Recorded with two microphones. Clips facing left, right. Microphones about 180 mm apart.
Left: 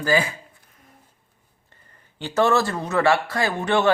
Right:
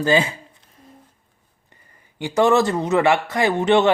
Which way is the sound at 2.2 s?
15° right (ahead or behind).